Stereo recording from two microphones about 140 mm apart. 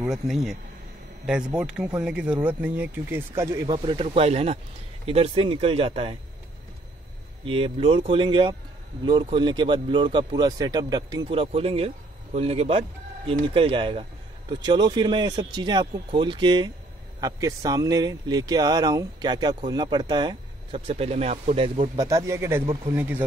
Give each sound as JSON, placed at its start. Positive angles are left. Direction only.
{"t": 0.0, "sound": "speech", "side_deg": -5}
{"t": 3.6, "sound": "speech", "side_deg": -35}
{"t": 7.4, "sound": "speech", "side_deg": -40}
{"t": 20.7, "sound": "speech", "side_deg": -45}
{"t": 21.9, "sound": "speech", "side_deg": -25}